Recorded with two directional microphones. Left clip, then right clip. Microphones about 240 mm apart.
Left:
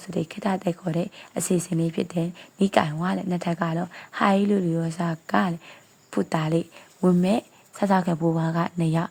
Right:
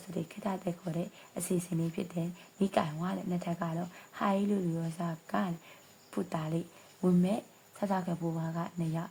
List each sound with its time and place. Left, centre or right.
0.1 s speech: left